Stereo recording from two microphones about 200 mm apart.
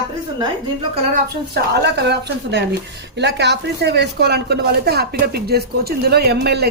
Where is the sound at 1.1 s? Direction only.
55° right (ahead or behind).